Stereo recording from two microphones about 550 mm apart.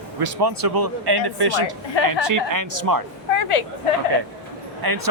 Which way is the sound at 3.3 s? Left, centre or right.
Left.